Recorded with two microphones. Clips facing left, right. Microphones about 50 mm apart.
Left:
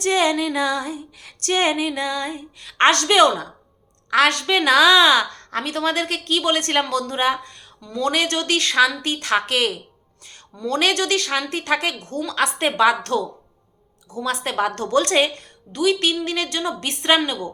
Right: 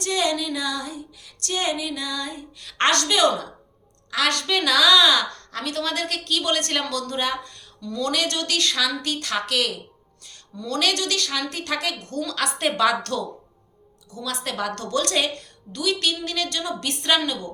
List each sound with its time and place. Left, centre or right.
0.0 s female singing: left
1.2 s music: left
2.6 s a woman's voice: centre
2.9 s music: left
4.3 s a woman's voice: left
14.1 s a woman's voice: left